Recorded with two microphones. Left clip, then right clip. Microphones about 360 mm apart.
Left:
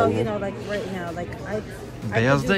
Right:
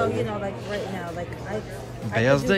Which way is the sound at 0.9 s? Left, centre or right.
Centre.